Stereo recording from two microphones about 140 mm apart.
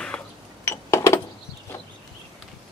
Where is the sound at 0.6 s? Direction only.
20° left (ahead or behind).